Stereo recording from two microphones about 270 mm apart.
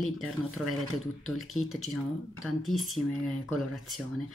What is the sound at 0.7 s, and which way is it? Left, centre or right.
Speech, centre.